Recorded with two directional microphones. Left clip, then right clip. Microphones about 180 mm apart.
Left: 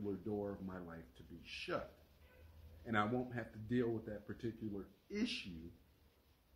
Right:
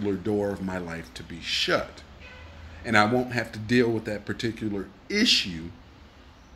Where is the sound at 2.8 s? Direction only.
5° right (ahead or behind).